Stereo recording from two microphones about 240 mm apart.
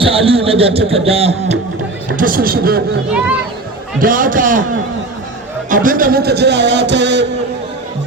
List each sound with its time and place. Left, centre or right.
0.0 s speech: right
2.1 s speech: right
4.0 s speech: right
5.7 s speech: right